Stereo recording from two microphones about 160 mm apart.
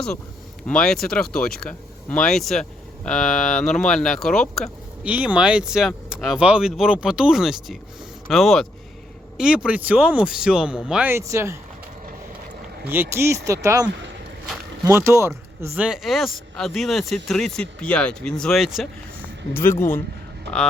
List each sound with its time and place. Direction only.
0.7 s speech: 5° left (ahead or behind)
5.0 s speech: 10° right (ahead or behind)
12.9 s speech: 15° right (ahead or behind)
14.8 s speech: 15° right (ahead or behind); by 18.9 s centre (ahead or behind)
19.5 s speech: 15° left (ahead or behind)